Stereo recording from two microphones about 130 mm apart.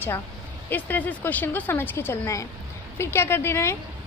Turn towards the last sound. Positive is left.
turn(degrees=20)  # may be behind; listen again after turning